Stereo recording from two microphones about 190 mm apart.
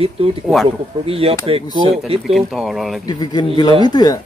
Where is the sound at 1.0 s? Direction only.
30° right (ahead or behind).